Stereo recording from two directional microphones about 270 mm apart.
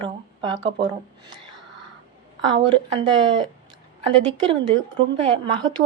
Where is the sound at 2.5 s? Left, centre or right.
Centre.